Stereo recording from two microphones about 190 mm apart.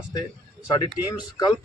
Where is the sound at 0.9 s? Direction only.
5° right (ahead or behind).